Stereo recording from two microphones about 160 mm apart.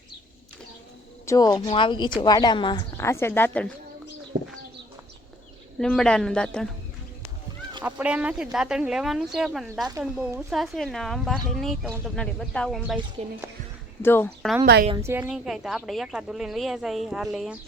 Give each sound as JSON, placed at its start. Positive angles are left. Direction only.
{"t": 1.3, "sound": "speech", "side_deg": 25}
{"t": 3.0, "sound": "speech", "side_deg": 15}
{"t": 5.8, "sound": "speech", "side_deg": 5}
{"t": 7.9, "sound": "speech", "side_deg": -10}
{"t": 14.0, "sound": "speech", "side_deg": 15}
{"t": 14.6, "sound": "a woman's voice", "side_deg": -80}
{"t": 14.9, "sound": "a woman's voice", "side_deg": -15}
{"t": 15.3, "sound": "speech", "side_deg": 0}